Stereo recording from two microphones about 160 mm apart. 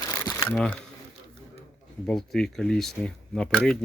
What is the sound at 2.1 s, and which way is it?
Speech, 5° left (ahead or behind).